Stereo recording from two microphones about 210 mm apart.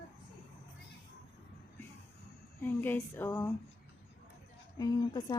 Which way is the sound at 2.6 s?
10° left (ahead or behind).